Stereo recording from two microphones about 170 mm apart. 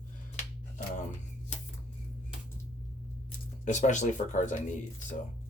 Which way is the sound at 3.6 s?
45° left (ahead or behind).